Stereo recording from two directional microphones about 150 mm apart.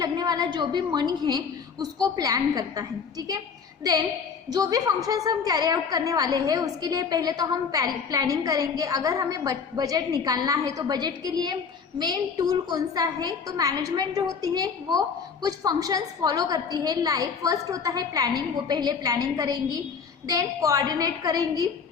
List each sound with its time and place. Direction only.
0.0 s a woman's voice: 25° right (ahead or behind)
4.4 s a woman's voice: 25° right (ahead or behind)